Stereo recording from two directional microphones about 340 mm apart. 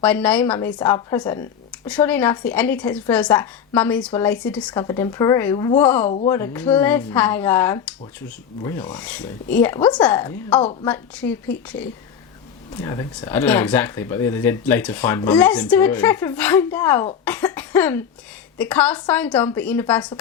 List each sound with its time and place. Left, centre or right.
0.0 s a woman's voice: centre
6.1 s speech: centre
6.3 s a woman's voice: centre
17.2 s cough: centre
18.5 s a woman's voice: centre